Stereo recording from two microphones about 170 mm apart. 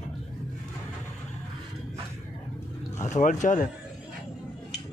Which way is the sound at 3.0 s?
45° left (ahead or behind).